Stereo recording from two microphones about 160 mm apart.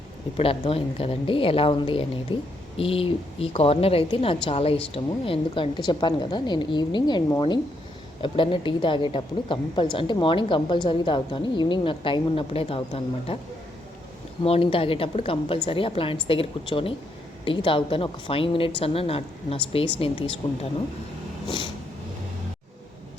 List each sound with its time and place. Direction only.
0.3 s a woman's voice: 35° left (ahead or behind)
14.4 s a woman's voice: 35° left (ahead or behind)
21.4 s vehicle: 30° left (ahead or behind)